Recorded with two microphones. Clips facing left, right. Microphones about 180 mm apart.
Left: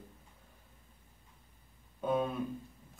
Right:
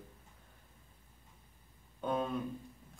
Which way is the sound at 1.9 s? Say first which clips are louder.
Left 3 dB; 5° left (ahead or behind).